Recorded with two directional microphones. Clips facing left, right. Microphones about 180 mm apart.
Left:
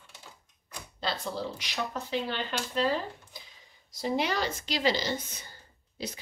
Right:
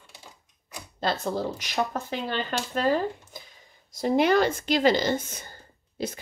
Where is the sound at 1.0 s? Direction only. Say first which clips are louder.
Right 6 dB; 45° right (ahead or behind).